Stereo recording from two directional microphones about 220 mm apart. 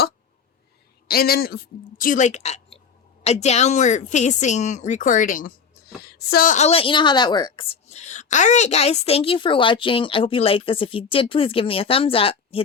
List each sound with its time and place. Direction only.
1.0 s a woman's voice: 45° left (ahead or behind); by 12.6 s 25° left (ahead or behind)